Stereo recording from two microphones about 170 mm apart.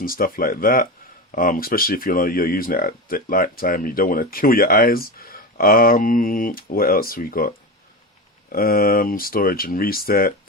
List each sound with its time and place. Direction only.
0.0 s speech: 60° left (ahead or behind)